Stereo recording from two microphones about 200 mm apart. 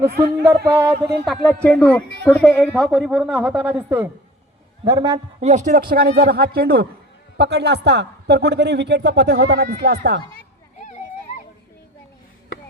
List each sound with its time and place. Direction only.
0.1 s a man's voice: 50° right (ahead or behind)
0.6 s speech: 5° right (ahead or behind)
4.9 s a man's voice: 20° right (ahead or behind)
5.4 s a man's voice: 35° right (ahead or behind); by 10.2 s 55° right (ahead or behind)
10.8 s a sound: 40° left (ahead or behind)